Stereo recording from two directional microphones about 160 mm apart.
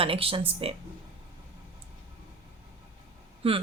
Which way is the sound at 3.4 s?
35° right (ahead or behind).